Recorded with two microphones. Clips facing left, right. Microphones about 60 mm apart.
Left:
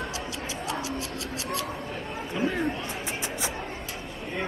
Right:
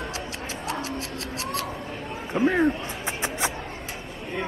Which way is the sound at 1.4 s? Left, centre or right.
Right.